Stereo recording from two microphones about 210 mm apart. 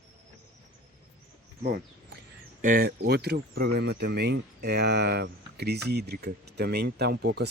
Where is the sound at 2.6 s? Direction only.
45° right (ahead or behind).